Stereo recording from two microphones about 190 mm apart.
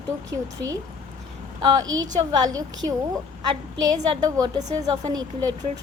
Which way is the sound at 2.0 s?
20° right (ahead or behind).